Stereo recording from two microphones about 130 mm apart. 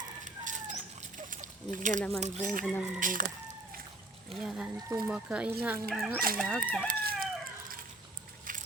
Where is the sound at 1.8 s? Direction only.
80° right.